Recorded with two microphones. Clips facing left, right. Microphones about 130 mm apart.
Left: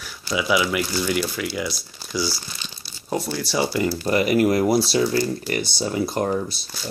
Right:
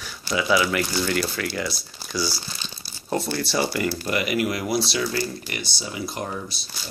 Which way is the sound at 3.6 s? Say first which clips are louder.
Left 3 dB; 25° left (ahead or behind).